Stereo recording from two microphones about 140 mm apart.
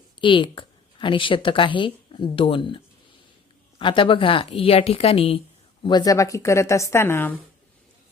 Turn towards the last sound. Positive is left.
turn(degrees=15)  # may be behind; listen again after turning